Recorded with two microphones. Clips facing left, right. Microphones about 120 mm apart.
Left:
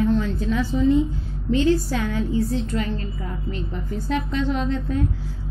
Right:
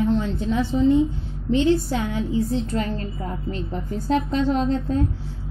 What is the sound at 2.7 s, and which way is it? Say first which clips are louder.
A woman's voice: right 1 dB; 35° right (ahead or behind).